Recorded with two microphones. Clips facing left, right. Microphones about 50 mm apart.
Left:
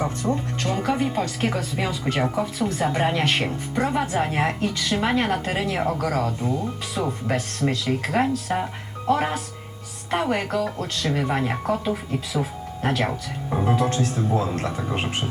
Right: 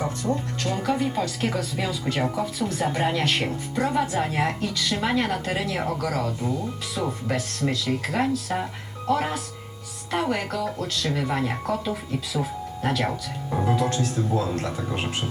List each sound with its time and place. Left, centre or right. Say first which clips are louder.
0.3 s speech: left 1 dB; left
11.1 s speech: left 3 dB; left